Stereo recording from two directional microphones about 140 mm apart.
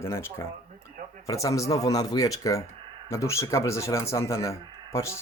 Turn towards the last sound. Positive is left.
turn(degrees=20)  # may be behind; listen again after turning